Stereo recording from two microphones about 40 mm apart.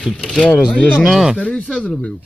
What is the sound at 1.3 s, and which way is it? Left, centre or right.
Speech, left.